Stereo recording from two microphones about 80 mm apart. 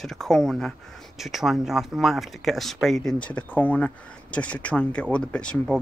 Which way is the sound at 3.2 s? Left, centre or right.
Centre.